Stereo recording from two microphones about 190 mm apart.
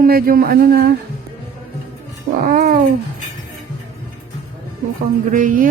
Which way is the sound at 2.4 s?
50° right (ahead or behind).